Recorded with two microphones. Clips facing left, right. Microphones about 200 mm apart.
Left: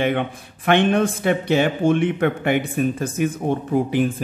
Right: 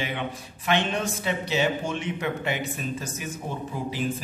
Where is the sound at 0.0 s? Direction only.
55° left (ahead or behind).